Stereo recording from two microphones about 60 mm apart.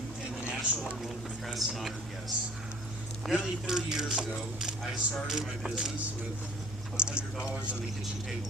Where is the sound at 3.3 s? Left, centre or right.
Centre.